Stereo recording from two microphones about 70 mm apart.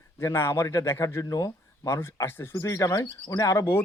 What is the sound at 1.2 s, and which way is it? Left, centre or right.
Speech, left.